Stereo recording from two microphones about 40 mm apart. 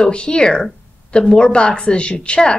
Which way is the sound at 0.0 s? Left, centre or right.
Left.